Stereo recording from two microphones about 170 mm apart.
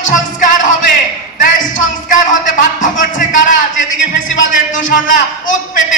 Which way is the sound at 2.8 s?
50° left (ahead or behind).